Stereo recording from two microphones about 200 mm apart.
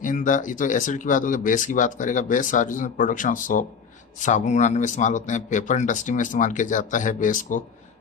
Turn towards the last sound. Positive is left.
turn(degrees=40)  # may be behind; listen again after turning